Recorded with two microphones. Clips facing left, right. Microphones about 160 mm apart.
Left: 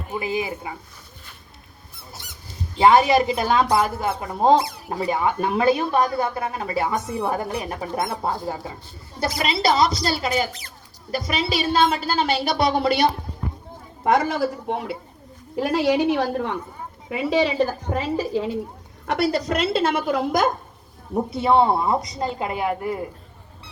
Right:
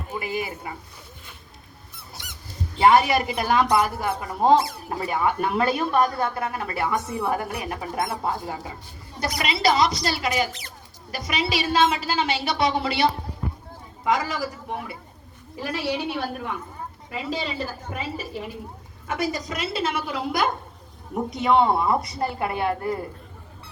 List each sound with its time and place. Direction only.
0.1 s speech: 20° left (ahead or behind)
2.7 s a woman's voice: 20° left (ahead or behind); by 13.1 s 40° left (ahead or behind)
14.0 s a woman's voice: 60° left (ahead or behind)
15.5 s a woman's voice: 80° left; by 20.5 s 45° left (ahead or behind)
21.3 s speech: 30° left (ahead or behind)